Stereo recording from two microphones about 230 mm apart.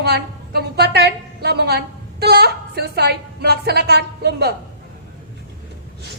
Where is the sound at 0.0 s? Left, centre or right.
Right.